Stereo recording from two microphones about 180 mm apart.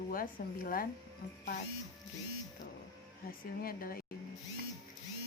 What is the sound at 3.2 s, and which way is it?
Speech, 55° left (ahead or behind).